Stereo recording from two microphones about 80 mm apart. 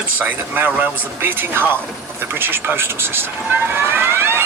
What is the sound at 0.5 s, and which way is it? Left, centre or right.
Speech, right.